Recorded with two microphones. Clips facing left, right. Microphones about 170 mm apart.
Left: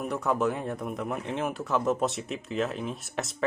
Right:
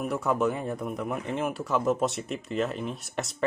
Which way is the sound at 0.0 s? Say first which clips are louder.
Right 1 dB; centre (ahead or behind).